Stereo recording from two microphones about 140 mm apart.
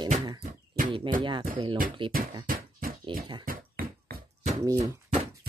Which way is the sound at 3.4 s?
90° right.